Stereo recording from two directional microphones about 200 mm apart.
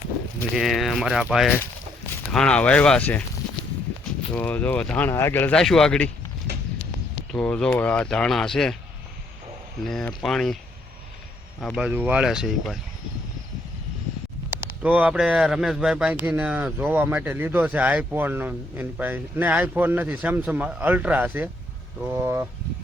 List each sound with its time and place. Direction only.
0.5 s speech: centre (ahead or behind)
4.4 s speech: 5° left (ahead or behind)
7.3 s speech: 5° left (ahead or behind)
9.8 s speech: 5° left (ahead or behind)
11.6 s speech: 5° left (ahead or behind)
11.9 s speech: 5° right (ahead or behind)
14.8 s a man's voice: 5° right (ahead or behind)